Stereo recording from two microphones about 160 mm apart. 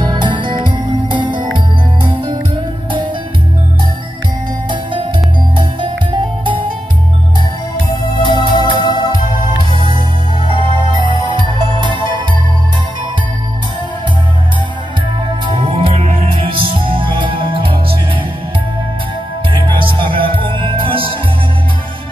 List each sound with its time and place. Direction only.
0.0 s music: 30° right (ahead or behind)
5.6 s music: 30° right (ahead or behind)
7.9 s organ: 30° left (ahead or behind)
8.5 s music: 30° left (ahead or behind)
11.5 s music: 30° right (ahead or behind)
15.6 s music: 35° right (ahead or behind)
19.7 s music: 30° right (ahead or behind)